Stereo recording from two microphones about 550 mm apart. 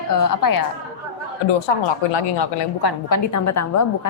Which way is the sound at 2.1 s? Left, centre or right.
Left.